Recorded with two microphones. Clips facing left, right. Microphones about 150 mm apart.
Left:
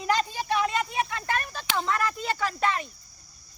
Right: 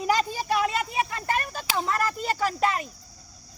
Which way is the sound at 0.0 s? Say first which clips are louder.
Right 2 dB; 5° right (ahead or behind).